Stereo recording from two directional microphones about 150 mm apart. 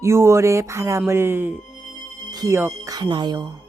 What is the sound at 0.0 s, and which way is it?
Speech, 20° right (ahead or behind).